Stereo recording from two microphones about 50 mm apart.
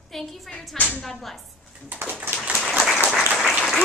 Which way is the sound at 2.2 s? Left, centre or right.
Right.